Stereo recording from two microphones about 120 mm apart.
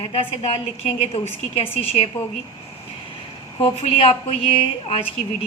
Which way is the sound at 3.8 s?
55° left (ahead or behind).